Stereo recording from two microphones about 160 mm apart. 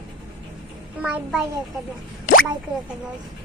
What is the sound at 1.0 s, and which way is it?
Speech, 5° right (ahead or behind).